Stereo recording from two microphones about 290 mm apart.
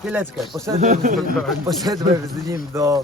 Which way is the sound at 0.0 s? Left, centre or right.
Centre.